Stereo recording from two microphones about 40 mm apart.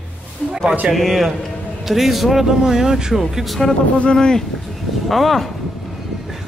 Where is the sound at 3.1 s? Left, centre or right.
Centre.